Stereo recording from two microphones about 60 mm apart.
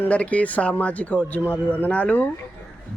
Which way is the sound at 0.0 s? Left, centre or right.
Left.